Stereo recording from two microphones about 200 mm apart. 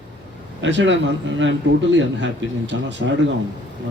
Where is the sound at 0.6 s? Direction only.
65° right (ahead or behind).